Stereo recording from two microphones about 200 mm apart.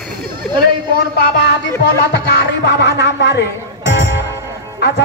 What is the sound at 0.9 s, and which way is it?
Speech, 55° left (ahead or behind).